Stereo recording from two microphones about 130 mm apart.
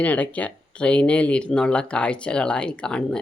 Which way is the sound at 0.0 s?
10° left (ahead or behind).